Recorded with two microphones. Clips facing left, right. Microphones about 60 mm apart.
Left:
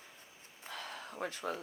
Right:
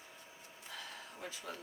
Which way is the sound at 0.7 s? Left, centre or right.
Left.